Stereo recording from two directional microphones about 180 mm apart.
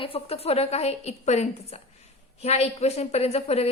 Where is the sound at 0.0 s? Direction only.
35° left (ahead or behind).